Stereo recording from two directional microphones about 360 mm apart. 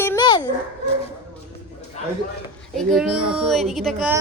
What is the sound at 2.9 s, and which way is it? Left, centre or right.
A child's voice, centre.